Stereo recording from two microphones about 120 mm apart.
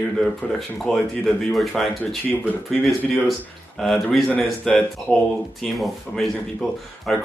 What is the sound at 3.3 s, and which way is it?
Speech, centre (ahead or behind).